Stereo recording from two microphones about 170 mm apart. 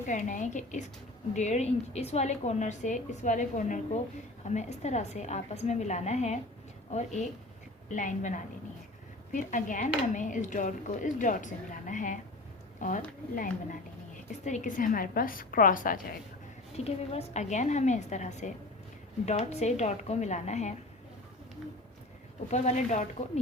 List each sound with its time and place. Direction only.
0.1 s a woman's voice: 50° left (ahead or behind)
16.7 s a woman's voice: 40° left (ahead or behind)
22.4 s speech: 40° left (ahead or behind)